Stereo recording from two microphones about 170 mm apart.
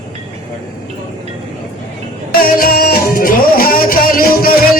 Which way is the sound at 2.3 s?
60° left (ahead or behind).